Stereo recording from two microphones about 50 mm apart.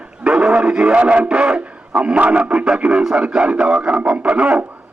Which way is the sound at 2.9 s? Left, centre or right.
Centre.